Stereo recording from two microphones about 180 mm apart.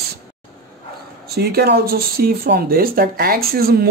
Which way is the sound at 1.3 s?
60° right (ahead or behind).